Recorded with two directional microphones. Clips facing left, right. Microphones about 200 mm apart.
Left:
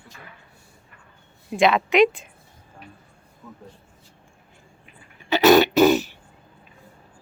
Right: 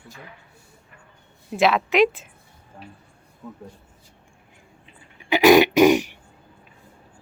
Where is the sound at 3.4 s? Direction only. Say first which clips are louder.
Right 5 dB; 15° right (ahead or behind).